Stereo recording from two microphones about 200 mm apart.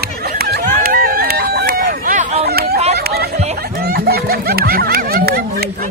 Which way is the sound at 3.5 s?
50° right (ahead or behind).